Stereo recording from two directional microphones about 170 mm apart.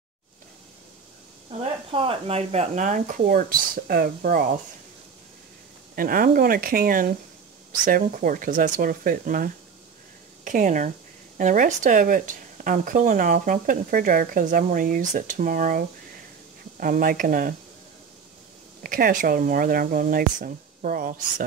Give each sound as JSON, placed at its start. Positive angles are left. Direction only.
{"t": 1.5, "sound": "speech", "side_deg": -30}
{"t": 5.9, "sound": "speech", "side_deg": -55}
{"t": 16.8, "sound": "speech", "side_deg": -55}
{"t": 18.8, "sound": "speech", "side_deg": -55}